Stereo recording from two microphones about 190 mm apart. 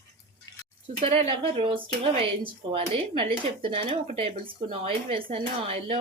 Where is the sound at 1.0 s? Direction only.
30° right (ahead or behind).